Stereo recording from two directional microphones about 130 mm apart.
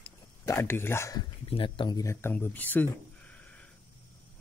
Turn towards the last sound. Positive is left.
turn(degrees=10)  # may be behind; listen again after turning